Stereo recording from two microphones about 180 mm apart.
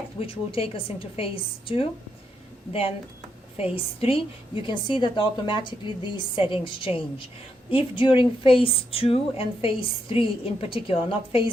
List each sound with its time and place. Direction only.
0.2 s a woman's voice: 30° left (ahead or behind)
3.6 s a woman's voice: 30° left (ahead or behind)